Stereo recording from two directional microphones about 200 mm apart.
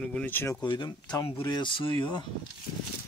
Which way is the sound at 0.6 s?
20° left (ahead or behind).